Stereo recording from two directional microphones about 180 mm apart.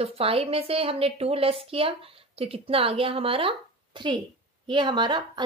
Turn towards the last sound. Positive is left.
turn(degrees=-25)  # may be behind; listen again after turning